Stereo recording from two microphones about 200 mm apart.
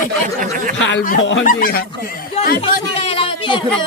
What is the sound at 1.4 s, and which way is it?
Speech, 45° left (ahead or behind).